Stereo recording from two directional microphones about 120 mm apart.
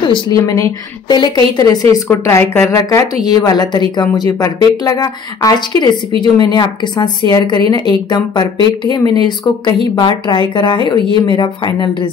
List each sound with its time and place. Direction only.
0.0 s a woman's voice: 40° left (ahead or behind)
0.4 s speech: 25° left (ahead or behind)
1.0 s speech: 35° left (ahead or behind)
2.0 s speech: 20° left (ahead or behind); by 12.1 s 40° left (ahead or behind)